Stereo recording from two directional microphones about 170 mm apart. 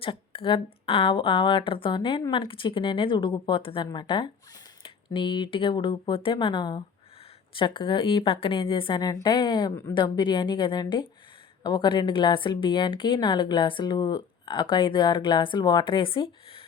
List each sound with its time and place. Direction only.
0.0 s a woman's voice: 30° left (ahead or behind)